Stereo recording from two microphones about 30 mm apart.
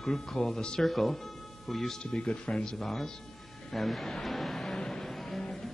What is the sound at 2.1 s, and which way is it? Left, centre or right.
Speech, left.